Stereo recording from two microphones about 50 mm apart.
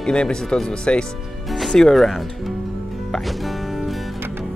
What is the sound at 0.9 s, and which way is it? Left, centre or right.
Music, left.